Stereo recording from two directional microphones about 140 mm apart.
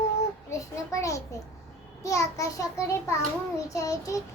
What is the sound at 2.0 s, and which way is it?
A child's voice, 20° left (ahead or behind).